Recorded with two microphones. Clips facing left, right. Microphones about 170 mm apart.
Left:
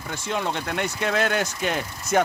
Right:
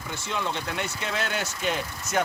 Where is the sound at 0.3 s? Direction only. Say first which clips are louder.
Left 4 dB; 55° left (ahead or behind).